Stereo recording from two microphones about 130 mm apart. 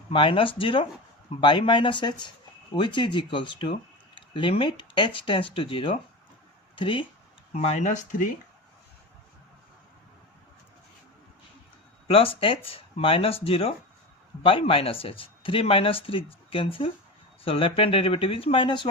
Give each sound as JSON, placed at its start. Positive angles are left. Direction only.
{"t": 0.1, "sound": "speech", "side_deg": 40}
{"t": 7.5, "sound": "speech", "side_deg": 60}
{"t": 12.0, "sound": "speech", "side_deg": 45}